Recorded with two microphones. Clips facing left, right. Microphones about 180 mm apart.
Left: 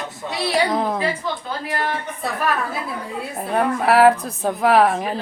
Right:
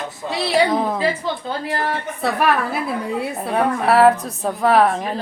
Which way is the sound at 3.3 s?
Centre (ahead or behind).